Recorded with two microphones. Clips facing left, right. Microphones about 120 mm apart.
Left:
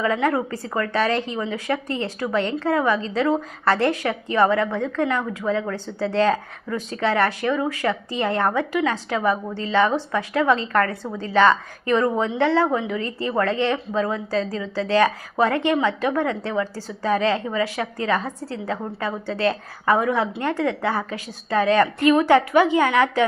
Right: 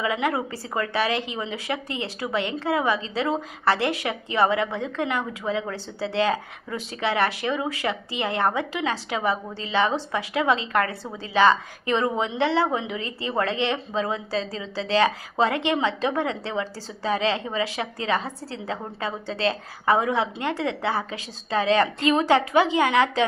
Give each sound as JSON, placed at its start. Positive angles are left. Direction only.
{"t": 0.0, "sound": "speech", "side_deg": -15}